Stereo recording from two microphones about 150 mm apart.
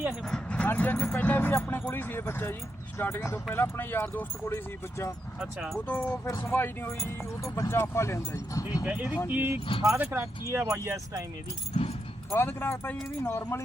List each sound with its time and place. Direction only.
0.3 s speech: 5° left (ahead or behind)
5.4 s speech: centre (ahead or behind)
6.1 s speech: 20° left (ahead or behind)
8.8 s speech: 10° right (ahead or behind)
11.7 s speech: 45° left (ahead or behind)
12.3 s speech: 15° left (ahead or behind)